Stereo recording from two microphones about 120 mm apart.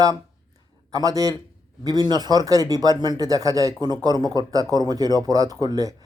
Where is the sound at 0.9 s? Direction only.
30° right (ahead or behind).